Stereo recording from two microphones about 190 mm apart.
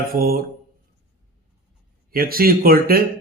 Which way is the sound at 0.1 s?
50° right (ahead or behind).